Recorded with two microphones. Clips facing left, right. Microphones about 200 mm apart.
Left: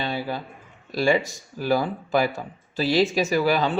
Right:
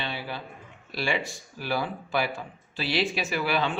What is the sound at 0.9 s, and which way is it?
Speech, 40° left (ahead or behind).